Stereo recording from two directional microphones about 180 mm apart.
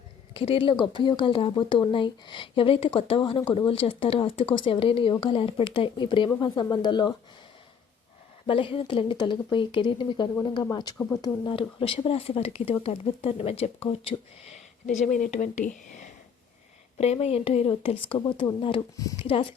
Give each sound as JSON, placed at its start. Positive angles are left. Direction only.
{"t": 0.3, "sound": "speech", "side_deg": 30}
{"t": 8.4, "sound": "speech", "side_deg": 30}
{"t": 11.4, "sound": "speech", "side_deg": 30}
{"t": 15.9, "sound": "a sound", "side_deg": 45}
{"t": 17.0, "sound": "speech", "side_deg": 35}